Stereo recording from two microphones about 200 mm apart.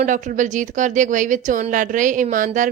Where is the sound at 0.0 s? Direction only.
40° right (ahead or behind).